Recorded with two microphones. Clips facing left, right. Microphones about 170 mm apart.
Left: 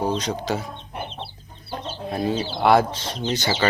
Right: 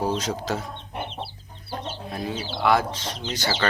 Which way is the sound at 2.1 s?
30° left (ahead or behind).